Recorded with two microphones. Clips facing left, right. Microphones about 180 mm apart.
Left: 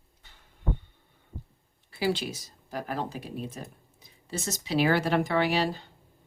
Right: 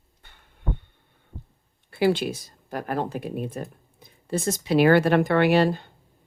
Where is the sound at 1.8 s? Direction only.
60° right (ahead or behind).